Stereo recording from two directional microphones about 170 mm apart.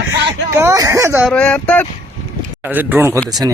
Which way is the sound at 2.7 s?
10° right (ahead or behind).